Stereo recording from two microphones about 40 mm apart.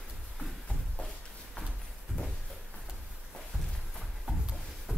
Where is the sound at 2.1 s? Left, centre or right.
Left.